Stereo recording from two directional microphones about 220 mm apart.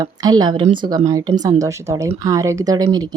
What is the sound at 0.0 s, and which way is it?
A woman's voice, 15° right (ahead or behind).